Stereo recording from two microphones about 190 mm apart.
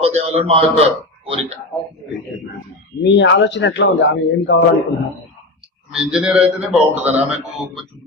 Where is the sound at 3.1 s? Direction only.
75° left (ahead or behind).